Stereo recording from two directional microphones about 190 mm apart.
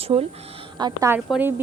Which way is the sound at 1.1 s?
5° right (ahead or behind).